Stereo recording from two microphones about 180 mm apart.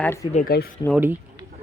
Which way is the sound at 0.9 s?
10° right (ahead or behind).